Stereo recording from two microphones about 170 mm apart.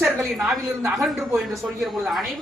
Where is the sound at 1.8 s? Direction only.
Centre (ahead or behind).